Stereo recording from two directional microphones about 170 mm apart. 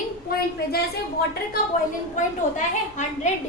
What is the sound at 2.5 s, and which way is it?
Speech, 45° left (ahead or behind).